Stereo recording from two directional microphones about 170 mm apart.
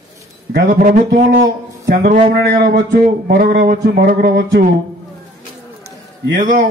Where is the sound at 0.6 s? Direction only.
50° right (ahead or behind).